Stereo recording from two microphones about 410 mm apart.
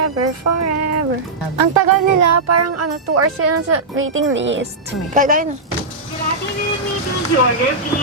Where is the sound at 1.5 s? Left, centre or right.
Right; by 5.5 s centre.